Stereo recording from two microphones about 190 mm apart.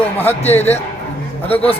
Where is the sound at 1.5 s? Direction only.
30° left (ahead or behind).